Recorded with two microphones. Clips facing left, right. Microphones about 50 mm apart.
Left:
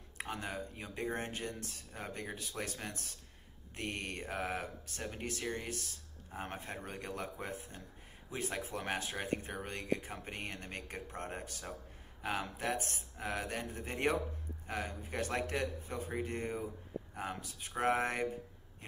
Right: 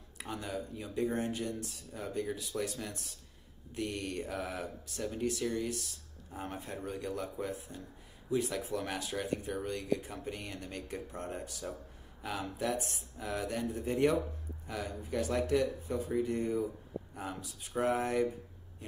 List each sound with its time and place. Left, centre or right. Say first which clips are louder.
0.2 s speech: right 1 dB; left